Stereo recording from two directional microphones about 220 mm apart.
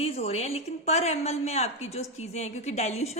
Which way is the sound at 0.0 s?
30° left (ahead or behind).